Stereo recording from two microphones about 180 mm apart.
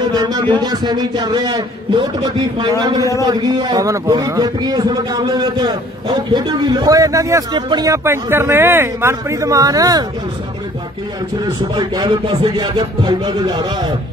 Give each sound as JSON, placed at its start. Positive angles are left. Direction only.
{"t": 0.1, "sound": "a man's voice", "side_deg": -25}
{"t": 11.7, "sound": "a man's voice", "side_deg": -25}